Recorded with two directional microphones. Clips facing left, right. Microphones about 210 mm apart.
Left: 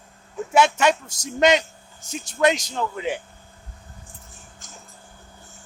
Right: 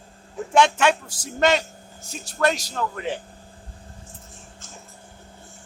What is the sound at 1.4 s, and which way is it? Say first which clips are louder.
A man's voice: left 2 dB; 20° left (ahead or behind).